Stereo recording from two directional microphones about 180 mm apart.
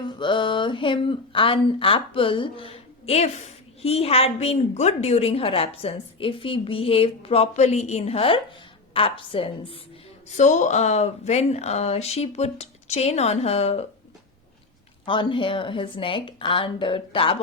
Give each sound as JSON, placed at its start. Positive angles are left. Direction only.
{"t": 0.0, "sound": "speech", "side_deg": 25}
{"t": 10.2, "sound": "speech", "side_deg": 40}
{"t": 15.0, "sound": "speech", "side_deg": 25}